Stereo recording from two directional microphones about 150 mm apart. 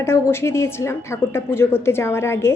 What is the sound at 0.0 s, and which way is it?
A woman's voice, 15° left (ahead or behind).